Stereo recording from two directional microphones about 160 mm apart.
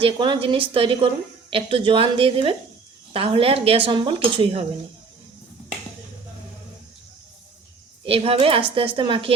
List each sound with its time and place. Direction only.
0.0 s speech: 35° right (ahead or behind)
8.0 s speech: 35° right (ahead or behind)